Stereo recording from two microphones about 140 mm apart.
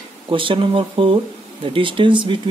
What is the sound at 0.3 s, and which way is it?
Speech, 40° right (ahead or behind).